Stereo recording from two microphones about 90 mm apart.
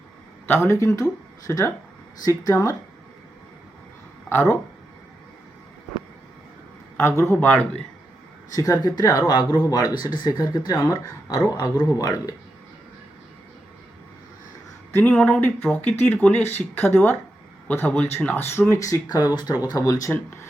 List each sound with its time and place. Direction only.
0.4 s speech: 25° left (ahead or behind)
4.3 s speech: 25° left (ahead or behind)
6.9 s a man's voice: 30° left (ahead or behind)
7.3 s speech: 20° left (ahead or behind)
8.5 s speech: 45° left (ahead or behind)
10.7 s speech: 35° left (ahead or behind)
11.4 s speech: 45° left (ahead or behind)
14.9 s speech: 15° left (ahead or behind)
18.8 s speech: 45° left (ahead or behind)
19.7 s speech: 35° left (ahead or behind)